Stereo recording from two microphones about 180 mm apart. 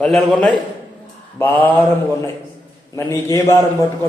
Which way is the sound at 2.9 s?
15° left (ahead or behind).